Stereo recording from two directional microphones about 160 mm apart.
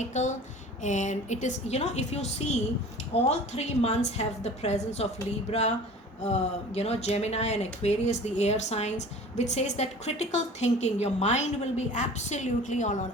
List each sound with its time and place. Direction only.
0.0 s speech: 50° left (ahead or behind)